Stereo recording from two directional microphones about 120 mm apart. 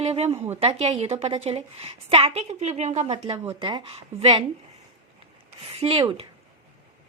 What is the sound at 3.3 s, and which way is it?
Speech, 40° right (ahead or behind).